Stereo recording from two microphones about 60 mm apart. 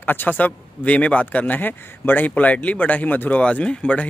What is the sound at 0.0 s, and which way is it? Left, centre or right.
Speech, left.